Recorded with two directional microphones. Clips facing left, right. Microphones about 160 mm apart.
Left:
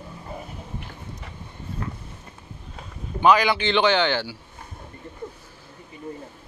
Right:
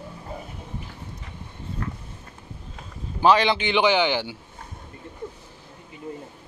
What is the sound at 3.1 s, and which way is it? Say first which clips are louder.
Speech: even; 30° right (ahead or behind).